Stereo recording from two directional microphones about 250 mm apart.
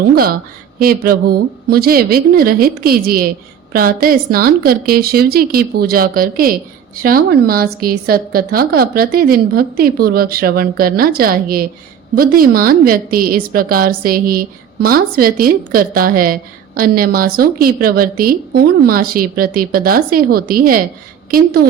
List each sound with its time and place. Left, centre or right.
0.0 s a woman's voice: right